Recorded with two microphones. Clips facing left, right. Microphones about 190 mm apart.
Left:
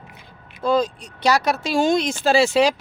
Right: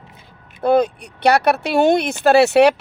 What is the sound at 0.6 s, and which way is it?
Speech, 60° right (ahead or behind).